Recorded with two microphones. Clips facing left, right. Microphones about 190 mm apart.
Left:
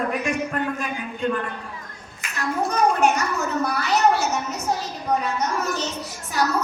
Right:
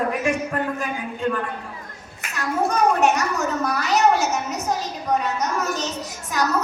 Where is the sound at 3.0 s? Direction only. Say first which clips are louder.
Right 1 dB; 40° right (ahead or behind).